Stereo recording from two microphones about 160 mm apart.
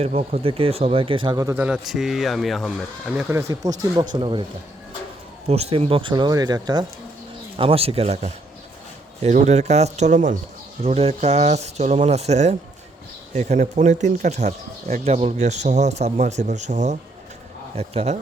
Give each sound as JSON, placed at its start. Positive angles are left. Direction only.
{"t": 0.0, "sound": "speech", "side_deg": -40}
{"t": 1.5, "sound": "speech", "side_deg": -10}
{"t": 3.2, "sound": "speech", "side_deg": -15}
{"t": 5.5, "sound": "speech", "side_deg": -40}
{"t": 7.5, "sound": "speech", "side_deg": -35}